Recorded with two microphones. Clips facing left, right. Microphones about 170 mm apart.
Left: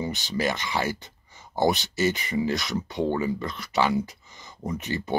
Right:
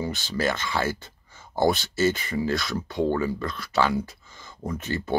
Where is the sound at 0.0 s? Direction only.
20° left (ahead or behind).